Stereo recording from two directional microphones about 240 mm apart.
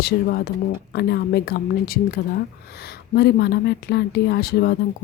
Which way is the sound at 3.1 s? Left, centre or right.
Left.